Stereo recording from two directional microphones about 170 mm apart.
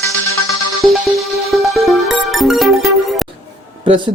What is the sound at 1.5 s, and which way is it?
Music, centre (ahead or behind).